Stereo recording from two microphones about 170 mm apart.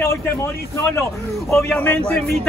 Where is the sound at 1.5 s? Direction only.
5° left (ahead or behind).